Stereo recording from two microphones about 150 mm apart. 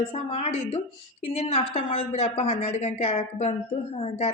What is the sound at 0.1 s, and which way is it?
A woman's voice, 45° left (ahead or behind).